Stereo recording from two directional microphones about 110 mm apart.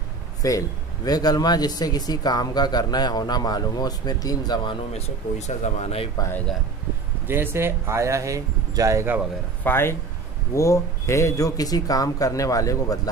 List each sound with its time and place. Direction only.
0.4 s speech: 30° left (ahead or behind)
5.8 s speech: 70° left (ahead or behind)
7.2 s speech: 20° right (ahead or behind)
9.6 s speech: 20° left (ahead or behind)